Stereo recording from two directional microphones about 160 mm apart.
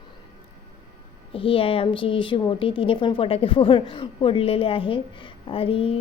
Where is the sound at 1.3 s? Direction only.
35° left (ahead or behind).